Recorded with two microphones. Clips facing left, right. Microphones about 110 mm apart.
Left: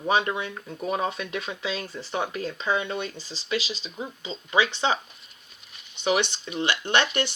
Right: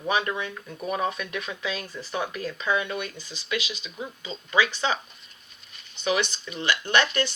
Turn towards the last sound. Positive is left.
turn(degrees=25)  # may be behind; listen again after turning